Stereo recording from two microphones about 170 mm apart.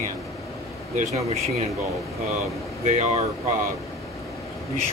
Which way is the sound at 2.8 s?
40° right (ahead or behind).